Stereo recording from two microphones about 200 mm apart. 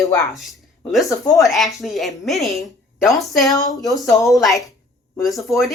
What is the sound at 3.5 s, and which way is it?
Speech, 15° left (ahead or behind).